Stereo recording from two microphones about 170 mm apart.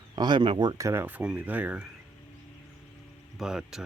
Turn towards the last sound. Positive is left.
turn(degrees=-5)  # may be behind; listen again after turning